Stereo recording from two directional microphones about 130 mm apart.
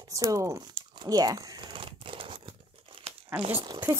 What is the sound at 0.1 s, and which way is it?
Crumpling, 25° right (ahead or behind).